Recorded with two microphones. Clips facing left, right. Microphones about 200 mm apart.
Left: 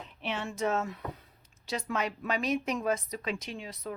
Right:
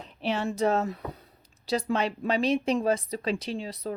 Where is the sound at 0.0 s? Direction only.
35° right (ahead or behind).